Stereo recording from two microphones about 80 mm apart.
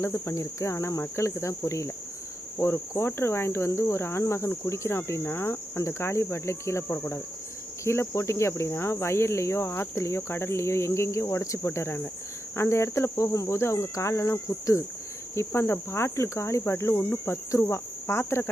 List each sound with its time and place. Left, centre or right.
0.0 s cricket: left